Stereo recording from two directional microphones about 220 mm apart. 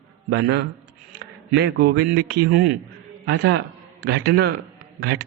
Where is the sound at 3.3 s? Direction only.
50° right (ahead or behind).